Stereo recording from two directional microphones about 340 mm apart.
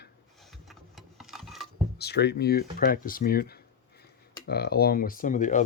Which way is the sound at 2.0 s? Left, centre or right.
Left.